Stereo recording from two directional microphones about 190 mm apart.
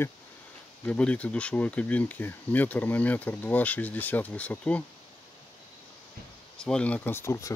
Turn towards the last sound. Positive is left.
turn(degrees=15)  # may be behind; listen again after turning